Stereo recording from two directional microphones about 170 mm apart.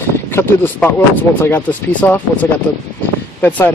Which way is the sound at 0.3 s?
15° left (ahead or behind).